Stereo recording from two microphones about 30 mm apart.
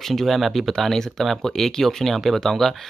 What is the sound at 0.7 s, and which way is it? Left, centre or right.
Speech, centre.